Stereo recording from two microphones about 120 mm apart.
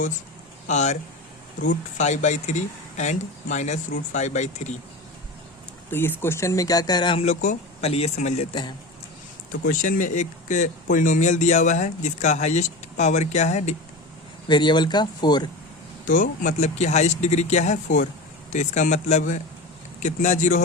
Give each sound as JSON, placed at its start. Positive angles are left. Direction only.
{"t": 0.7, "sound": "speech", "side_deg": 75}
{"t": 5.9, "sound": "speech", "side_deg": 20}
{"t": 7.2, "sound": "speech", "side_deg": 65}
{"t": 9.6, "sound": "speech", "side_deg": 90}
{"t": 14.4, "sound": "speech", "side_deg": 40}
{"t": 16.0, "sound": "speech", "side_deg": 90}